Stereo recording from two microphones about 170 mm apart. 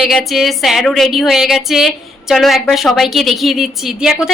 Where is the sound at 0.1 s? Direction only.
Centre (ahead or behind).